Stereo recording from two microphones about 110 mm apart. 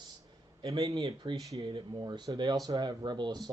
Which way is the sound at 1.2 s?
45° right (ahead or behind).